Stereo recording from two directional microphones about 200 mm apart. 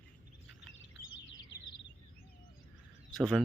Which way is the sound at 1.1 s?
70° left (ahead or behind).